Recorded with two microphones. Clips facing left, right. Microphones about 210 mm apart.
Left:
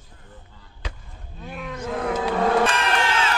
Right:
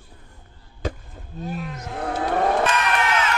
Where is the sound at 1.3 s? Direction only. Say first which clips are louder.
Right 7 dB; 40° right (ahead or behind).